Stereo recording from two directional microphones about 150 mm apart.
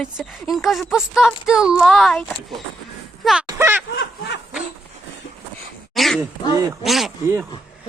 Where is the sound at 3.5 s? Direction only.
15° right (ahead or behind).